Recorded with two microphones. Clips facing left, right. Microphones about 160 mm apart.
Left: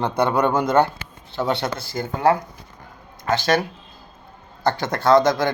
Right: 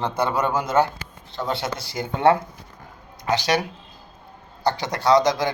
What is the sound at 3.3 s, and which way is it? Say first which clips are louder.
Speech: left 2 dB; 50° left (ahead or behind).